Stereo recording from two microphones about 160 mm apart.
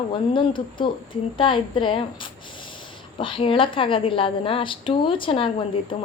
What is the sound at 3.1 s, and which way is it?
A woman's voice, 30° left (ahead or behind).